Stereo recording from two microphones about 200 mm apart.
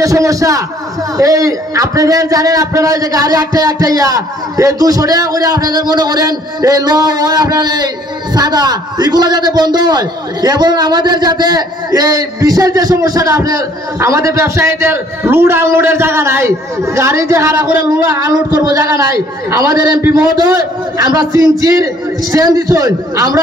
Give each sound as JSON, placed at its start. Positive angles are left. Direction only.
{"t": 0.0, "sound": "a man's voice", "side_deg": -15}